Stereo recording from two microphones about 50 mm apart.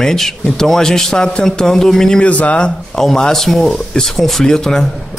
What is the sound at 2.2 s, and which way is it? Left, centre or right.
Speech, left.